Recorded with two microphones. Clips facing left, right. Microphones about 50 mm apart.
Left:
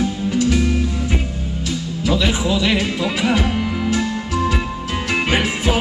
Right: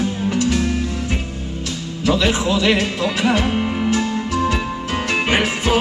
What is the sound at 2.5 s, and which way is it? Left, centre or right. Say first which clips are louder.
Music: right 1 dB; centre.